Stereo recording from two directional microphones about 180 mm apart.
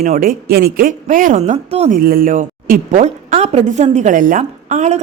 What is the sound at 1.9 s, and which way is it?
A woman's voice, 55° right (ahead or behind).